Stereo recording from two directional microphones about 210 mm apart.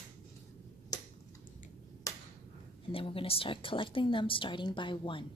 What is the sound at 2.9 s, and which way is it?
A woman's voice, 25° left (ahead or behind).